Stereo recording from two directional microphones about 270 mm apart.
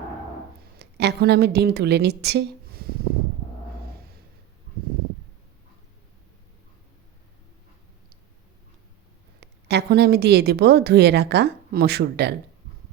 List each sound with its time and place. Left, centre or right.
0.8 s a woman's voice: right
9.4 s a woman's voice: right